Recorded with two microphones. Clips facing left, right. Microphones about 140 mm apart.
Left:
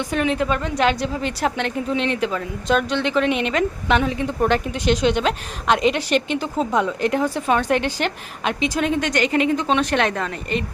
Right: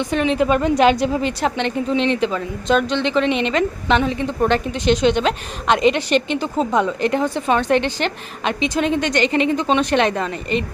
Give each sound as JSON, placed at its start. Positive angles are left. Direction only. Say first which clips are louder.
{"t": 0.0, "sound": "speech", "louder": "right 3 dB", "side_deg": 5}
{"t": 0.4, "sound": "a woman's voice", "louder": "right 5 dB", "side_deg": -15}
{"t": 1.2, "sound": "speech", "louder": "right 2 dB", "side_deg": 5}